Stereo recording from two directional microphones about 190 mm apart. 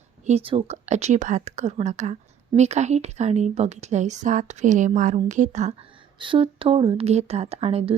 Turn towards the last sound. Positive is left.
turn(degrees=-30)  # may be behind; listen again after turning